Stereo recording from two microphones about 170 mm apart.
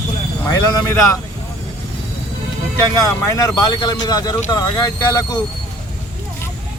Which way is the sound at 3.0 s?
20° left (ahead or behind).